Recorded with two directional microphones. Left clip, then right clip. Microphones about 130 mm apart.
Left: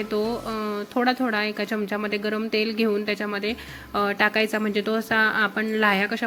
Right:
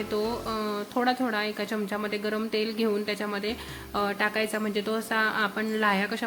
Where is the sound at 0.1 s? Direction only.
25° left (ahead or behind).